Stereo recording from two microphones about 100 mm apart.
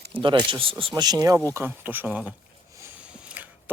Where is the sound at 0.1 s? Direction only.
55° right (ahead or behind).